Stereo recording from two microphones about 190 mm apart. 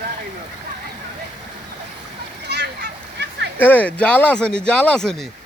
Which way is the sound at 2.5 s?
60° right (ahead or behind).